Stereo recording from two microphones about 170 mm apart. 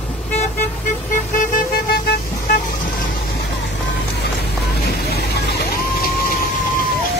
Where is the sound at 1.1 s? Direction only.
50° left (ahead or behind).